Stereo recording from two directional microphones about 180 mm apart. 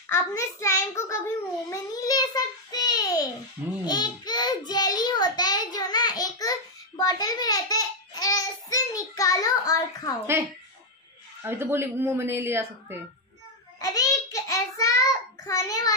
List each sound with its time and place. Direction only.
0.1 s a child's voice: 15° left (ahead or behind)
3.8 s child singing: 20° left (ahead or behind)
7.0 s babbling: 20° left (ahead or behind)
11.4 s a woman's voice: 15° right (ahead or behind)
13.7 s child singing: 20° left (ahead or behind)